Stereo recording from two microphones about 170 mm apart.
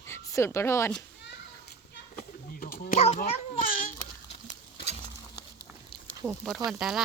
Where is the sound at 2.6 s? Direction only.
60° left (ahead or behind).